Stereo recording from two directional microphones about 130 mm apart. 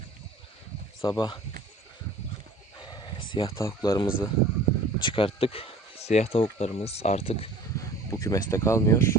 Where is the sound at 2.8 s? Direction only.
35° left (ahead or behind).